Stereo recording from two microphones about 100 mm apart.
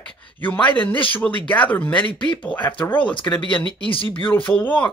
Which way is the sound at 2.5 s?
50° left (ahead or behind).